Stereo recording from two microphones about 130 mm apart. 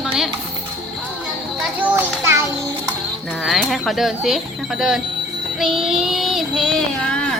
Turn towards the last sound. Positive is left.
turn(degrees=5)  # may be behind; listen again after turning